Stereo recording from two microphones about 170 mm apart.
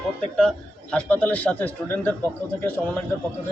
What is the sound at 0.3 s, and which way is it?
A man's voice, 5° left (ahead or behind).